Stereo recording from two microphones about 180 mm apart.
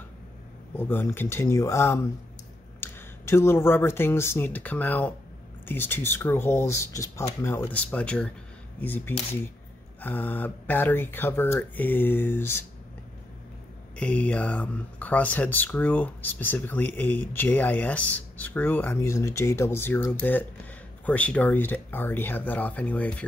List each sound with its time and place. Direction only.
0.7 s speech: 10° left (ahead or behind)
13.9 s speech: 10° left (ahead or behind)